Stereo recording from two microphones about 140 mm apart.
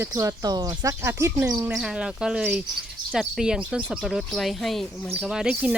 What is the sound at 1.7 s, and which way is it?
Speech, 5° right (ahead or behind).